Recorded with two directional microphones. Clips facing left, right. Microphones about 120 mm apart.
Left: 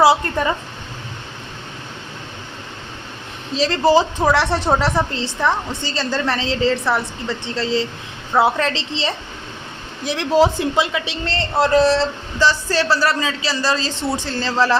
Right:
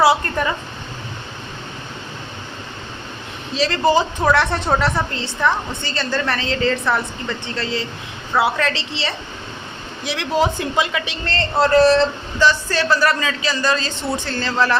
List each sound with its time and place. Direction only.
0.0 s a woman's voice: 20° left (ahead or behind)
3.5 s speech: 30° left (ahead or behind)
4.2 s a woman's voice: 10° left (ahead or behind)
8.3 s a man's voice: 25° left (ahead or behind)
10.4 s a man's voice: 25° left (ahead or behind)
12.4 s a man's voice: 30° left (ahead or behind)